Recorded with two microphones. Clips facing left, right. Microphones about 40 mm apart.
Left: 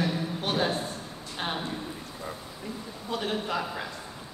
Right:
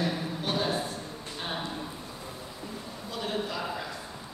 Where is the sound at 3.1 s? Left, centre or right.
Left.